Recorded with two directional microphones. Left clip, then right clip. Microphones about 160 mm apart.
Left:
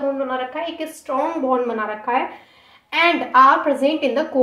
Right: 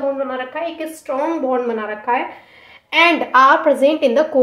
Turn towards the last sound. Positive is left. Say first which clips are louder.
# right 5 dB
turn(degrees=-40)  # may be behind; listen again after turning